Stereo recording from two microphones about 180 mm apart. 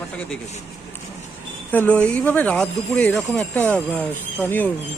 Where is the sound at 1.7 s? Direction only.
10° left (ahead or behind).